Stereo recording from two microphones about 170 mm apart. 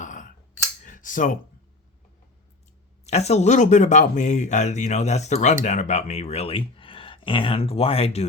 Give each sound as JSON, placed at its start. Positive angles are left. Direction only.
{"t": 0.0, "sound": "scissors", "side_deg": 50}
{"t": 0.9, "sound": "a sound", "side_deg": 50}
{"t": 3.1, "sound": "speech", "side_deg": 40}